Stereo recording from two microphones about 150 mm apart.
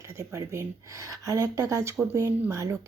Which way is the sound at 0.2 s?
20° right (ahead or behind).